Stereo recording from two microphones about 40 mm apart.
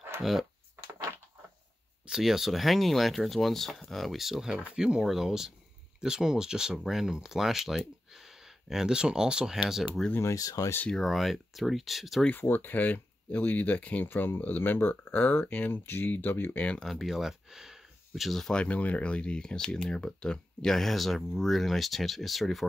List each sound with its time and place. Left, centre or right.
0.2 s speech: centre
2.0 s speech: centre
4.5 s speech: right
8.8 s speech: centre
11.0 s speech: centre
12.4 s speech: left
14.0 s speech: left
15.7 s speech: left
16.1 s speech: left
16.5 s speech: left
16.8 s speech: centre
17.2 s a sound: centre
18.5 s speech: left; by 22.7 s centre